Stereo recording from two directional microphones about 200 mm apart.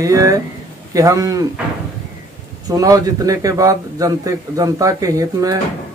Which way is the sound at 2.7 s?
15° right (ahead or behind).